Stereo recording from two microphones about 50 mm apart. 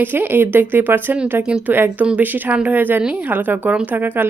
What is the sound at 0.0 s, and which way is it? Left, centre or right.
Speech, right.